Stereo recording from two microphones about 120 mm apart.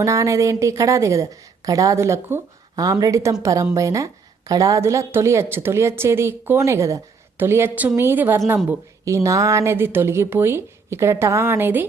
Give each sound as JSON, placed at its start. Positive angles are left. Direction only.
{"t": 0.0, "sound": "a woman's voice", "side_deg": -25}